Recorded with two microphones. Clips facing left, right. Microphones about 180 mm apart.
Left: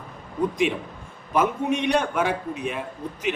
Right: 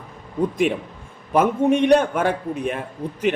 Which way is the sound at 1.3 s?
50° right (ahead or behind).